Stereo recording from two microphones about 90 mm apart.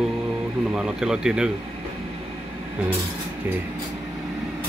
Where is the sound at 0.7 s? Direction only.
5° right (ahead or behind).